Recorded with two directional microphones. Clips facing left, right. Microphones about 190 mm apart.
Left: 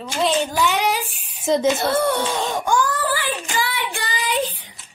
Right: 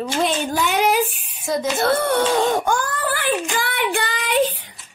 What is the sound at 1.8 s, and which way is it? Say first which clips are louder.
Baby cry: right 2 dB; 60° right (ahead or behind).